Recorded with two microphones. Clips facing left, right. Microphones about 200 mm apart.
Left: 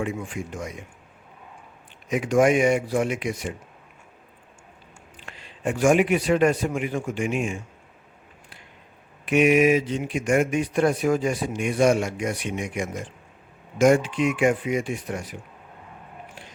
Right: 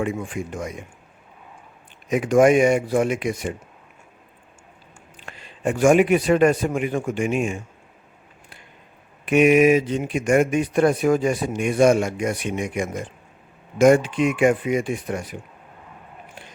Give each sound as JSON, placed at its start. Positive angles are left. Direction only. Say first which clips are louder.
{"t": 0.0, "sound": "speech", "louder": "right 3 dB", "side_deg": -55}
{"t": 2.0, "sound": "speech", "louder": "right 4 dB", "side_deg": -50}
{"t": 5.2, "sound": "a man's voice", "louder": "right 3 dB", "side_deg": -50}
{"t": 9.3, "sound": "speech", "louder": "right 3 dB", "side_deg": -50}